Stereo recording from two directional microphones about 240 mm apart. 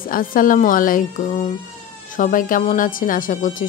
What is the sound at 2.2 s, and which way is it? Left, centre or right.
Speech, left.